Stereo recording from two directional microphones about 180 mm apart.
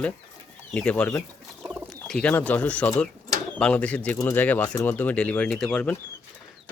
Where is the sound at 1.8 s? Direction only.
5° left (ahead or behind).